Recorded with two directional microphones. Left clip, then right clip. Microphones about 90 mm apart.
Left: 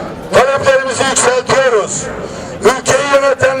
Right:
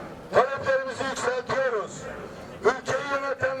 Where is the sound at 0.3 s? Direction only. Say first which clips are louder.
Left 13 dB; 40° left (ahead or behind).